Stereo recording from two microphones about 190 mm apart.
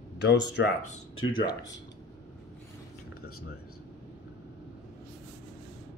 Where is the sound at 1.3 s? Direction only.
25° left (ahead or behind).